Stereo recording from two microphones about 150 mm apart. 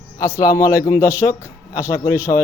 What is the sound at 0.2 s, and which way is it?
Speech, 25° left (ahead or behind).